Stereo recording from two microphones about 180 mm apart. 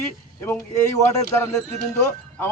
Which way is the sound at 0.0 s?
15° left (ahead or behind).